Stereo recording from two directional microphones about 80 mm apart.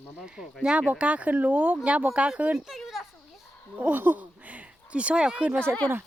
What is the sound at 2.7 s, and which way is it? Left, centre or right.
Speech, centre.